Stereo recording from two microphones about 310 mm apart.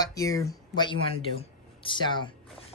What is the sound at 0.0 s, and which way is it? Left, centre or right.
Speech, centre.